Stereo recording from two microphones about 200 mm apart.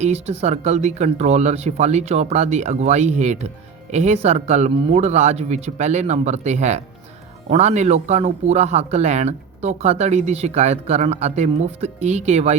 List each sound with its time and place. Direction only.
0.0 s speech: 35° right (ahead or behind)